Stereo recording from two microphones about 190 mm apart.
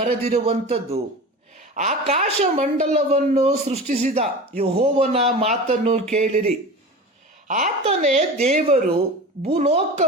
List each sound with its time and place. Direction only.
0.3 s a woman's voice: 30° right (ahead or behind)